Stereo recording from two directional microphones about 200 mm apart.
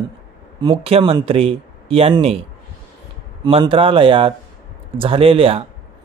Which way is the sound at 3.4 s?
25° right (ahead or behind).